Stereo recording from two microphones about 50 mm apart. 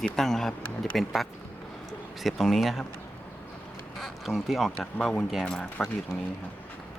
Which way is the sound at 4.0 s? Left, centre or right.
Centre.